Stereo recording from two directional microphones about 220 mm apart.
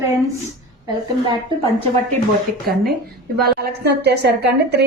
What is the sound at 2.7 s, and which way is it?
A woman's voice, 40° right (ahead or behind).